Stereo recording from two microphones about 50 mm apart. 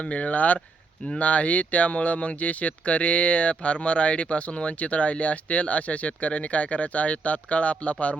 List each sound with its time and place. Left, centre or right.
0.0 s speech: left